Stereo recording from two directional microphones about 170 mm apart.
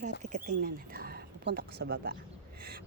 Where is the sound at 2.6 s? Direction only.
65° right (ahead or behind).